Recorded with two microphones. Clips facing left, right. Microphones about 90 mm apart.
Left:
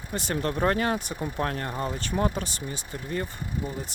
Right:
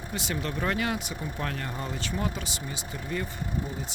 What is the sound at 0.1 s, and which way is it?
Speech, 45° left (ahead or behind).